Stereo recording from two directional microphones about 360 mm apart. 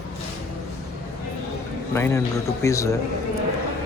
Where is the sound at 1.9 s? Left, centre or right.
Centre.